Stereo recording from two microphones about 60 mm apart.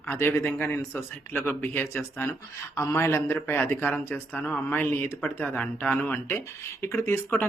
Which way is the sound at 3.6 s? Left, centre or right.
Left.